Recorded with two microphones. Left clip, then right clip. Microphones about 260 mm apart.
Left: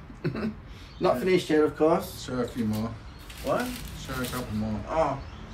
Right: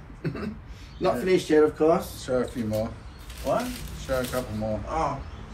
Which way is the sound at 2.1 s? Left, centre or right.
Centre.